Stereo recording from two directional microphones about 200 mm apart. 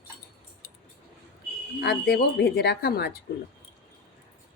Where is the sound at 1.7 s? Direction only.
50° left (ahead or behind).